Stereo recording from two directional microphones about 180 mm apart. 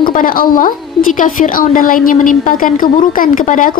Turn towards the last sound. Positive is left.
turn(degrees=50)  # may be behind; listen again after turning